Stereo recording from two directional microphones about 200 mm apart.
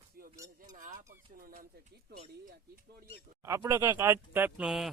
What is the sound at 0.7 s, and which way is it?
Speech, 40° right (ahead or behind).